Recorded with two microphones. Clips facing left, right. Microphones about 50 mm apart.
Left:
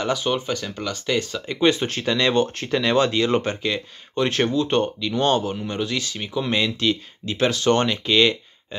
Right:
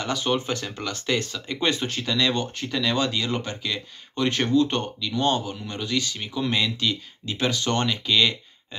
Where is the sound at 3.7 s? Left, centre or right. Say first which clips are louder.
Left 5 dB; centre.